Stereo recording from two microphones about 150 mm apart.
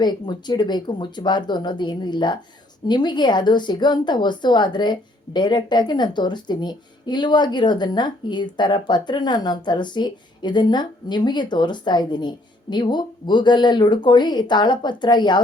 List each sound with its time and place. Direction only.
0.0 s speech: 30° left (ahead or behind)